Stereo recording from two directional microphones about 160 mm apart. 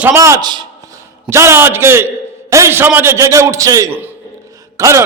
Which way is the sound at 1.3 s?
15° right (ahead or behind).